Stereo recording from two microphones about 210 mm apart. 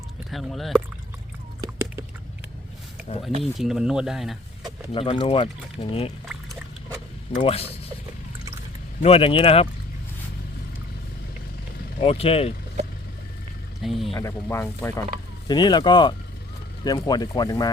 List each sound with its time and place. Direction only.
0.3 s speech: centre (ahead or behind)
1.6 s a sound: 15° right (ahead or behind)
3.4 s speech: centre (ahead or behind)
4.9 s speech: 25° left (ahead or behind)
7.3 s speech: 25° left (ahead or behind)
9.0 s speech: 30° left (ahead or behind)
11.9 s speech: 25° left (ahead or behind)
13.8 s speech: centre (ahead or behind)
14.2 s speech: 15° left (ahead or behind)